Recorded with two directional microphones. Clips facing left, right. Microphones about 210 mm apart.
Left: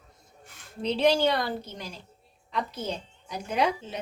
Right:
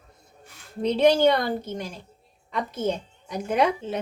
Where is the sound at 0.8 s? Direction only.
50° right (ahead or behind).